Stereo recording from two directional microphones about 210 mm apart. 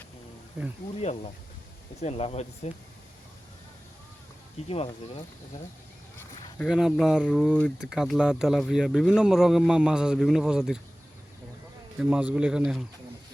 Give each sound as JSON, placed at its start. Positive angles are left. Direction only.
{"t": 0.6, "sound": "speech", "side_deg": -5}
{"t": 0.9, "sound": "speech", "side_deg": 30}
{"t": 6.7, "sound": "speech", "side_deg": 0}
{"t": 11.9, "sound": "speech", "side_deg": -5}